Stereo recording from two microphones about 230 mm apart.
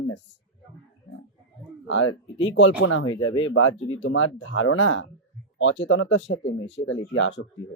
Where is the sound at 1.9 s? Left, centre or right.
Left.